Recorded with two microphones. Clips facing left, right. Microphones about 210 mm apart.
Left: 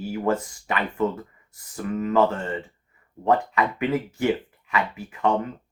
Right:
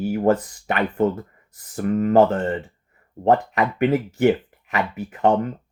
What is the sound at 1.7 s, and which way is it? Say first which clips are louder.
Speech: right 6 dB; 50° right (ahead or behind).